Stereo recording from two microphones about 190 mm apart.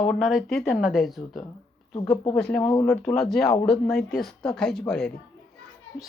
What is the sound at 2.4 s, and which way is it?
Speech, 5° left (ahead or behind).